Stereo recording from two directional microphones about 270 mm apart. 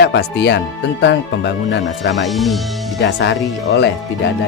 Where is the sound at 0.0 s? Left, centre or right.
Left.